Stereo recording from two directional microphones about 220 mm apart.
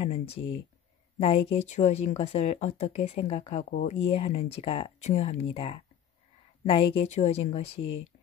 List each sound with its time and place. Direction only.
0.0 s speech: 25° left (ahead or behind)